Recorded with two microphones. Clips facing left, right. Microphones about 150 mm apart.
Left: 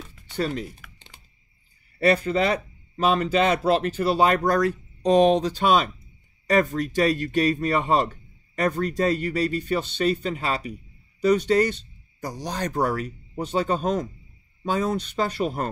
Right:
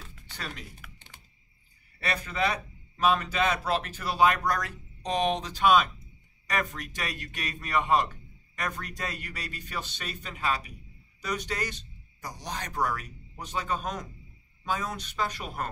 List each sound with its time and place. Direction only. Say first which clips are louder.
0.8 s computer keyboard: left 1 dB; centre (ahead or behind)
2.0 s speech: left 9 dB; 30° left (ahead or behind)